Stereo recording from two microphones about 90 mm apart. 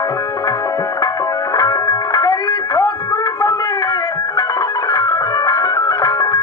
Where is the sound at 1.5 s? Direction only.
40° left (ahead or behind).